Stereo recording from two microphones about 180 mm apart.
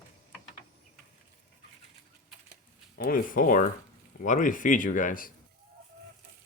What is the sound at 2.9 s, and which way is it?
Speech, 55° left (ahead or behind).